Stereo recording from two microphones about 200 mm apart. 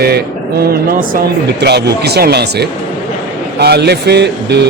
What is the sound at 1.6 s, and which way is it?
Speech, 55° right (ahead or behind).